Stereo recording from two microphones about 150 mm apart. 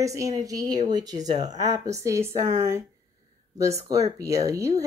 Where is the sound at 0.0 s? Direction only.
20° right (ahead or behind).